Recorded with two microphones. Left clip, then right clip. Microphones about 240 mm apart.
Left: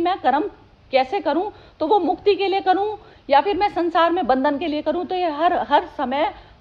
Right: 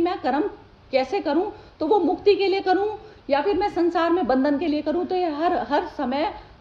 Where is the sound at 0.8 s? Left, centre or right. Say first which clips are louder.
Left 3 dB; centre.